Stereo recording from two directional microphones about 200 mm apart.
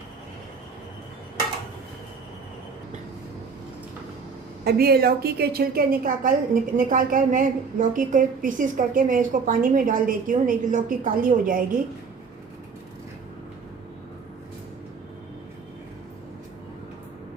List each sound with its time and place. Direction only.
4.6 s a woman's voice: 50° right (ahead or behind)